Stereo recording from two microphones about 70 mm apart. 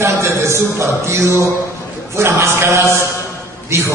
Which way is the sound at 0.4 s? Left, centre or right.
Right.